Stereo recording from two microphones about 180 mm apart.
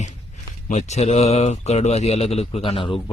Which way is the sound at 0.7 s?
40° left (ahead or behind).